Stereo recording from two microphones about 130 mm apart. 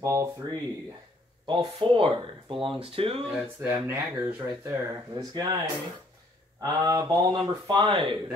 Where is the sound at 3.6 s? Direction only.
15° right (ahead or behind).